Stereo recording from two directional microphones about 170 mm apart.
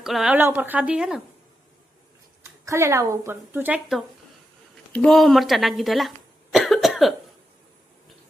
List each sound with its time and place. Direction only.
0.0 s speech: centre (ahead or behind)
2.4 s speech: 15° right (ahead or behind); by 7.1 s centre (ahead or behind)